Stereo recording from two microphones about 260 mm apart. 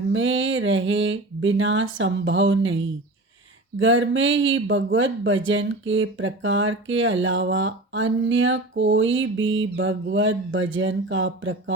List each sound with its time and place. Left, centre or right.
0.1 s speech: right